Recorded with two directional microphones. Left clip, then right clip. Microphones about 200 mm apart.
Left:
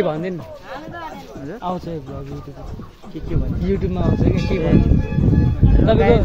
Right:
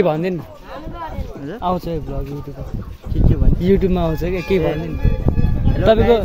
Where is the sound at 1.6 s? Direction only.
50° right (ahead or behind).